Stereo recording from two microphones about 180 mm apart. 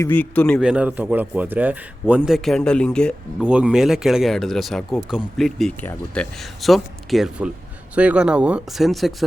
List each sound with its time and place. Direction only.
0.0 s a man's voice: 10° left (ahead or behind)
0.6 s a man's voice: 5° right (ahead or behind)
3.4 s a man's voice: 5° right (ahead or behind)